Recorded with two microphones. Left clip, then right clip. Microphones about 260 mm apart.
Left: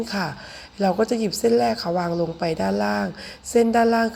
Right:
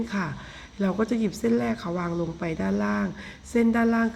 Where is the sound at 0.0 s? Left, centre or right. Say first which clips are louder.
Left 4 dB; centre.